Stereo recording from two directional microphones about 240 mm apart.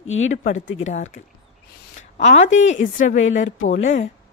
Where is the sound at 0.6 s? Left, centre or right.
Left.